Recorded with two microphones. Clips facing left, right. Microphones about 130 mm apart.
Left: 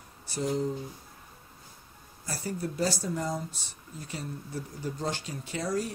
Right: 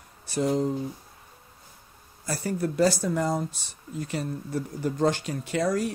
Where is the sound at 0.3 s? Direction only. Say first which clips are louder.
Right 5 dB; 65° right (ahead or behind).